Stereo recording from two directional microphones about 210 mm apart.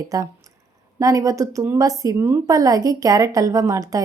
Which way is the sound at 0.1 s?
15° right (ahead or behind).